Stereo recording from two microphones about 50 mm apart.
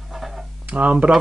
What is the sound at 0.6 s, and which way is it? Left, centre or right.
Speech, right.